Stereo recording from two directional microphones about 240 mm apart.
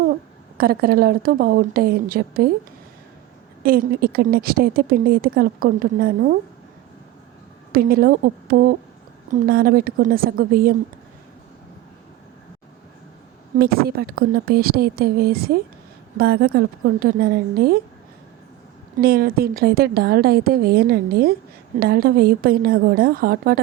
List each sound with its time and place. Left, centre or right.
0.5 s a woman's voice: right
3.6 s a woman's voice: right
7.7 s a woman's voice: right
13.6 s a woman's voice: right
19.0 s a woman's voice: right